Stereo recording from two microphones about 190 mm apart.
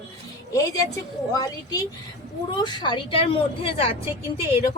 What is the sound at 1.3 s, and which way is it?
A woman's voice, 20° left (ahead or behind).